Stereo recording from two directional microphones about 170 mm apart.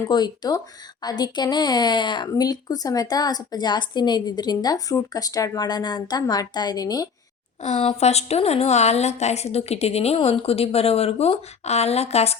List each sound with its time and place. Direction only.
0.0 s speech: 25° left (ahead or behind)
7.6 s a woman's voice: 40° left (ahead or behind)